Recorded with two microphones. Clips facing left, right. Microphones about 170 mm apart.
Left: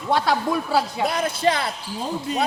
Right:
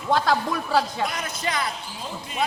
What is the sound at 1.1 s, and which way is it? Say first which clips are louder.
Speech: left 8 dB; 30° left (ahead or behind).